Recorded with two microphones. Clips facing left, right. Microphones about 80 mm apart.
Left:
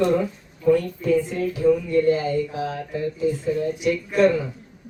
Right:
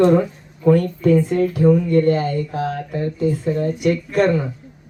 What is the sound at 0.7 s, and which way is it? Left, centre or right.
Speech, right.